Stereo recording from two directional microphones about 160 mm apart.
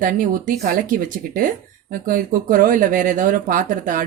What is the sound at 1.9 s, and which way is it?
Speech, 60° right (ahead or behind).